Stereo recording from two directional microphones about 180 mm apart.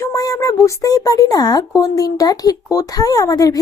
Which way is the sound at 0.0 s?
20° left (ahead or behind).